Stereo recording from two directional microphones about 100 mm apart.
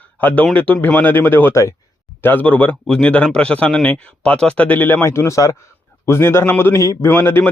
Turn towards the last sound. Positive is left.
turn(degrees=20)  # may be behind; listen again after turning